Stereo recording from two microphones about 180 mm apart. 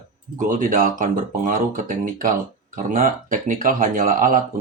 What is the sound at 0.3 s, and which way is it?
Speech, 45° right (ahead or behind).